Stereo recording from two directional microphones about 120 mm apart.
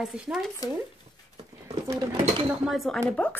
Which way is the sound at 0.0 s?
5° right (ahead or behind).